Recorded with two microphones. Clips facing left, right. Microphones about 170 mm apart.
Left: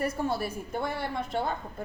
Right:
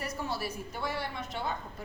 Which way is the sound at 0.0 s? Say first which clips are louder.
Left 6 dB; 50° left (ahead or behind).